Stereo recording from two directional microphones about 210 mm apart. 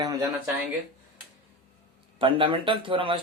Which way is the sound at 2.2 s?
25° right (ahead or behind).